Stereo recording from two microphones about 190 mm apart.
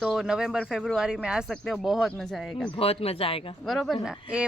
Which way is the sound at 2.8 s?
30° left (ahead or behind).